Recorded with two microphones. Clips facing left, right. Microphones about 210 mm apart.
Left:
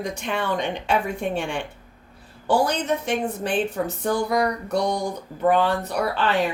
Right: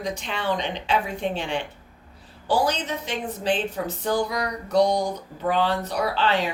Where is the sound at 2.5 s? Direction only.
60° left (ahead or behind).